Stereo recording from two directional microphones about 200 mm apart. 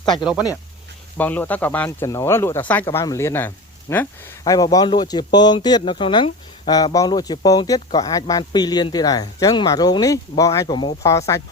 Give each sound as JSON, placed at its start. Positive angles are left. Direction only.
{"t": 0.0, "sound": "speech", "side_deg": 20}
{"t": 1.1, "sound": "speech", "side_deg": 10}